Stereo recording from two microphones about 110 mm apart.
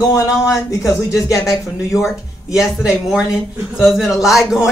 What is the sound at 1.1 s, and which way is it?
Speech, centre (ahead or behind).